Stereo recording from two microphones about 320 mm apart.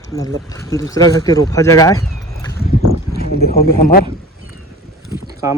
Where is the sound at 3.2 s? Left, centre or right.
Left.